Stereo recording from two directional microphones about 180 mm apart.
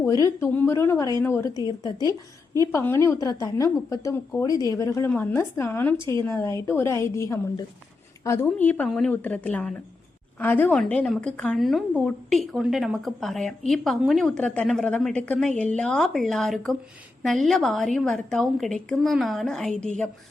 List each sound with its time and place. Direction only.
0.0 s a woman's voice: 15° left (ahead or behind)
2.7 s a woman's voice: 15° left (ahead or behind)